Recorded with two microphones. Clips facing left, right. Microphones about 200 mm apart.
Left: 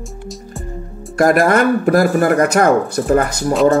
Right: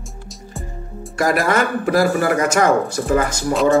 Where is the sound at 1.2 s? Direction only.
55° left (ahead or behind).